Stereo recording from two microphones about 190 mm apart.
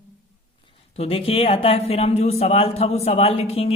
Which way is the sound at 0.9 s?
30° left (ahead or behind).